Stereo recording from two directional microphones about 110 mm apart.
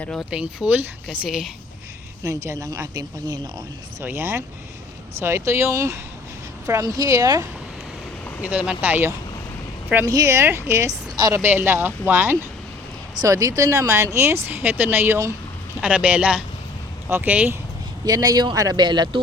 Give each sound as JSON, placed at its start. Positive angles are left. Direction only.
{"t": 0.0, "sound": "speech", "side_deg": 10}
{"t": 0.3, "sound": "a woman's voice", "side_deg": -10}
{"t": 2.2, "sound": "speech", "side_deg": -30}
{"t": 4.0, "sound": "speech", "side_deg": -20}
{"t": 8.4, "sound": "speech", "side_deg": -10}
{"t": 10.1, "sound": "speech", "side_deg": -30}
{"t": 11.3, "sound": "speech", "side_deg": -15}
{"t": 13.2, "sound": "speech", "side_deg": -30}
{"t": 18.0, "sound": "speech", "side_deg": -35}